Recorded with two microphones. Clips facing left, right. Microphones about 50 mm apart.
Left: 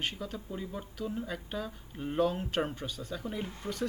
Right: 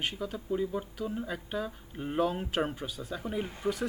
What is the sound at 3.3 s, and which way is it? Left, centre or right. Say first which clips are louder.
Speech: right 9 dB; centre.